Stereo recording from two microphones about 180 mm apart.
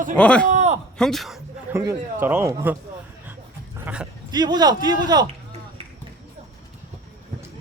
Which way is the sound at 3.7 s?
10° right (ahead or behind).